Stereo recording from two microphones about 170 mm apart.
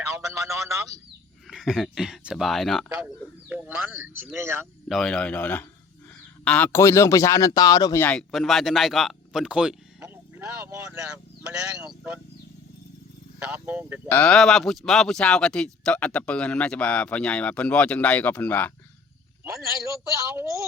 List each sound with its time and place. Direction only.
1.5 s speech: centre (ahead or behind)
3.5 s speech: 10° right (ahead or behind)
4.9 s speech: 5° left (ahead or behind); by 8.0 s 20° left (ahead or behind)
8.0 s speech: 5° left (ahead or behind)
10.0 s vehicle: 15° right (ahead or behind)
11.8 s speech: 5° right (ahead or behind)
13.5 s speech: 10° right (ahead or behind)
14.1 s speech: 5° left (ahead or behind)
19.5 s speech: 15° right (ahead or behind)